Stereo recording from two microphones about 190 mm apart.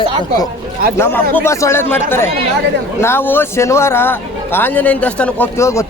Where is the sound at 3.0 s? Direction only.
10° left (ahead or behind).